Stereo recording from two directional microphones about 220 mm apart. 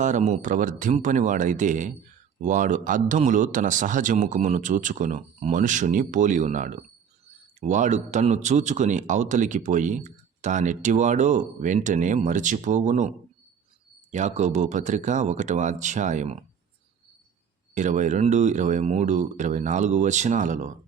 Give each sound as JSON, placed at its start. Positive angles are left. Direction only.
{"t": 0.0, "sound": "speech", "side_deg": -35}
{"t": 17.7, "sound": "speech", "side_deg": -35}